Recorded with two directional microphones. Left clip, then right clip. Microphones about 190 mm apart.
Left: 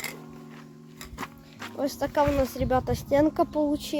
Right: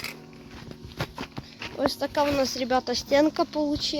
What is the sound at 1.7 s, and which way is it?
Speech, 5° left (ahead or behind).